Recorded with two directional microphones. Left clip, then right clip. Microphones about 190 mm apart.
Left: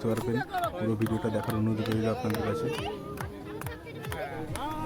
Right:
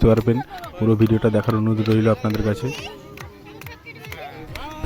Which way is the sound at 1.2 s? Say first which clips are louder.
Right 10 dB; 30° right (ahead or behind).